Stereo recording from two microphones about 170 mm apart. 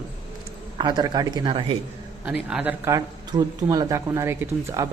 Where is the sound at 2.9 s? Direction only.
25° right (ahead or behind).